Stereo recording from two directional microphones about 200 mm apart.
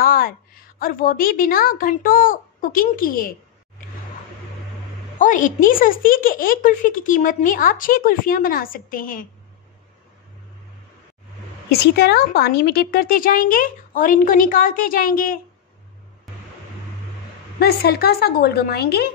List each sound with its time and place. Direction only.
0.0 s a sound: 45° left (ahead or behind)
0.7 s speech: 45° left (ahead or behind)
5.2 s speech: 40° left (ahead or behind)
11.9 s speech: 55° left (ahead or behind)
17.6 s speech: 50° left (ahead or behind)